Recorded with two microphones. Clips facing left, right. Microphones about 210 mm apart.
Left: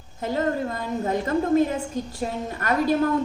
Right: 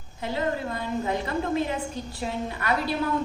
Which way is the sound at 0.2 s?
45° left (ahead or behind).